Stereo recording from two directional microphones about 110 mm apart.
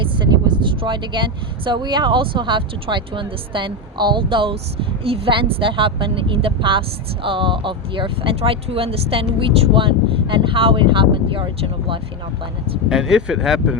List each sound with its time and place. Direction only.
0.0 s a woman's voice: 45° right (ahead or behind)
12.9 s speech: 5° right (ahead or behind)